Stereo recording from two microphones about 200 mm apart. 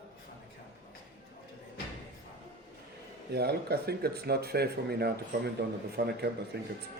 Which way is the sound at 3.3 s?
55° right (ahead or behind).